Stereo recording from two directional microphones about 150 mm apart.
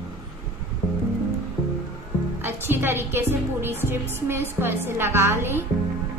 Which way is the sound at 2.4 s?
15° right (ahead or behind).